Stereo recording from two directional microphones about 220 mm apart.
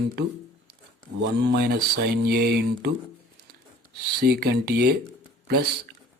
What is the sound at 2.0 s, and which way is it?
Mantra, 45° right (ahead or behind).